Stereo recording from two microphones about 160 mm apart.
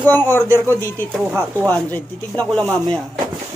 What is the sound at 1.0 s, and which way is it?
Speech, 15° right (ahead or behind).